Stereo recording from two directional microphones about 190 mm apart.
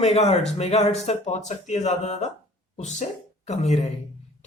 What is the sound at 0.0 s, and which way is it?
A man's voice, 35° left (ahead or behind).